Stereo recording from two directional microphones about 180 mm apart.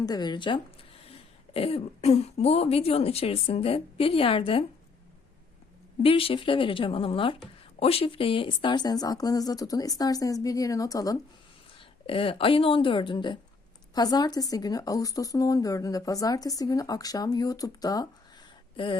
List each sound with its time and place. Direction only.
0.0 s speech: 20° left (ahead or behind)
6.0 s speech: 30° left (ahead or behind)
11.8 s speech: 30° left (ahead or behind)